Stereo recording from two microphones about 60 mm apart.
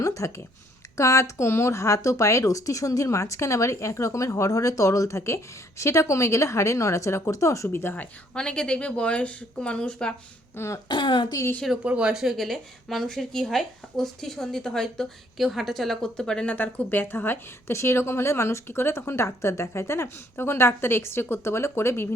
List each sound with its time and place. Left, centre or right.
0.0 s speech: left
7.7 s a woman's voice: left
8.4 s speech: centre
10.6 s a woman's voice: left
11.8 s speech: centre
12.1 s speech: centre
15.4 s speech: centre
16.5 s a woman's voice: left